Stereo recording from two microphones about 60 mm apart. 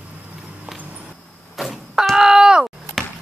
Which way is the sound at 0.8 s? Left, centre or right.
Right.